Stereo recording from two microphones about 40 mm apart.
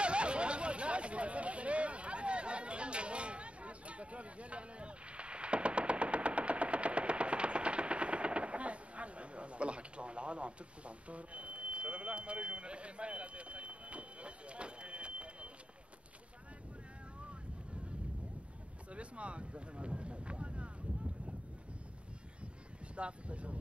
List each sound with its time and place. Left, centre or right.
0.0 s hubbub: right
18.9 s speech: right
22.9 s speech: right